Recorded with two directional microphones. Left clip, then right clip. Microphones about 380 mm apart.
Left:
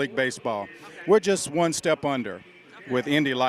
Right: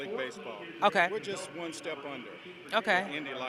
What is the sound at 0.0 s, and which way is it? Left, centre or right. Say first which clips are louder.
A man's voice: left 11 dB; left.